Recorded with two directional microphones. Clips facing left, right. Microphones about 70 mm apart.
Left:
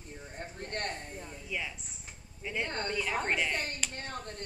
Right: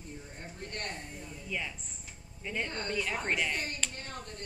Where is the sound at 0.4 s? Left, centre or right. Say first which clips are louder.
Left 5 dB; left.